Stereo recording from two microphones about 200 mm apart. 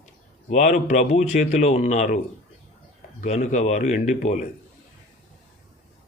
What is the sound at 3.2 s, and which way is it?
Speech, 35° left (ahead or behind).